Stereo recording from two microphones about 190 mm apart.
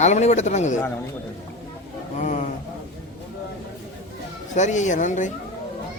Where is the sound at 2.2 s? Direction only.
40° left (ahead or behind).